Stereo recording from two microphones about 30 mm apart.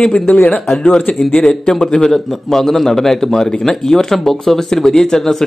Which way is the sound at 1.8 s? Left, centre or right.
Left.